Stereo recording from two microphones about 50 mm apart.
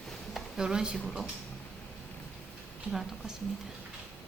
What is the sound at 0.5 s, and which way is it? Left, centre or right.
Speech, centre.